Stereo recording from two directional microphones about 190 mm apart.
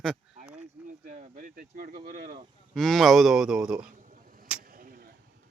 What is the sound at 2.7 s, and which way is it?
A man's voice, centre (ahead or behind).